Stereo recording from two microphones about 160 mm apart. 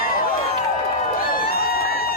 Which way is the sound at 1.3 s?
70° left (ahead or behind).